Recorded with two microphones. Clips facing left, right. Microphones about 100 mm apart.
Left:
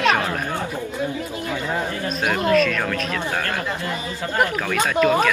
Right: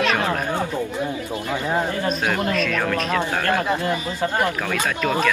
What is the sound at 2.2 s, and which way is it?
Speech, 15° left (ahead or behind).